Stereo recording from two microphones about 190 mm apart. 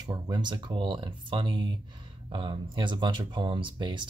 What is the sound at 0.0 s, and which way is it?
Speech, 20° right (ahead or behind).